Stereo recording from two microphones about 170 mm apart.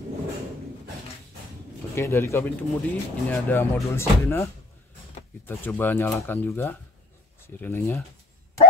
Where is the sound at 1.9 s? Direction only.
15° left (ahead or behind).